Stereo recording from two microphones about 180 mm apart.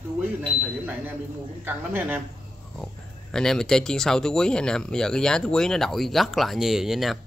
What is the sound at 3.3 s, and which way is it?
Speech, 5° left (ahead or behind).